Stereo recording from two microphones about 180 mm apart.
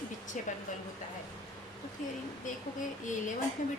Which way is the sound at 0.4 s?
45° left (ahead or behind).